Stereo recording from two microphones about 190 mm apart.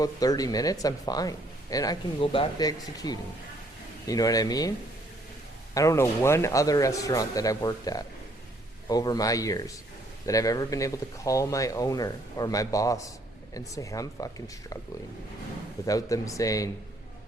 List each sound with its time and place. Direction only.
0.0 s speech: 20° left (ahead or behind)
5.7 s speech: 15° left (ahead or behind)
15.9 s speech: 20° left (ahead or behind)